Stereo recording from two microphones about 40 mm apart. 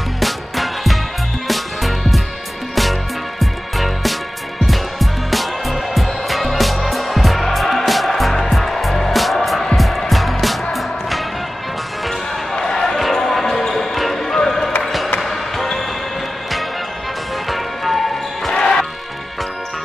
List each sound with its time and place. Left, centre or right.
0.2 s music: centre
12.5 s basketball bounce: centre
14.8 s music: centre
15.1 s basketball bounce: centre
17.5 s basketball bounce: centre
18.5 s music: centre